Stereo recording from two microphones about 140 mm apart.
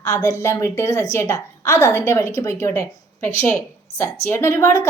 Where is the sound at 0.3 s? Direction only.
20° left (ahead or behind).